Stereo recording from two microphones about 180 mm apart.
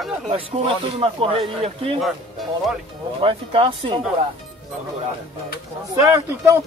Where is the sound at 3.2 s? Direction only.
30° right (ahead or behind).